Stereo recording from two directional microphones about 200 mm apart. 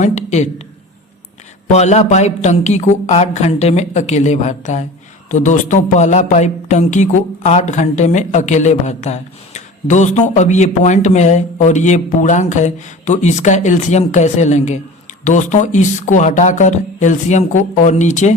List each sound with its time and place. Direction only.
0.0 s speech: 35° left (ahead or behind)
1.6 s speech: 35° left (ahead or behind)